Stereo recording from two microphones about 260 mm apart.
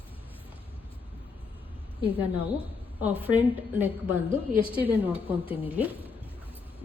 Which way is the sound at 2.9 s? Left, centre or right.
Centre.